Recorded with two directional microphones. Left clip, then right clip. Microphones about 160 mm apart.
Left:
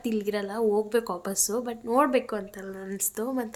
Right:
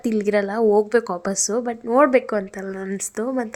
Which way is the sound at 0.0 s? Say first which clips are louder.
Right 9 dB; 40° right (ahead or behind).